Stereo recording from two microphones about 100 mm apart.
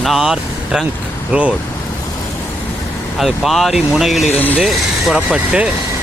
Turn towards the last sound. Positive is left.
turn(degrees=-10)  # may be behind; listen again after turning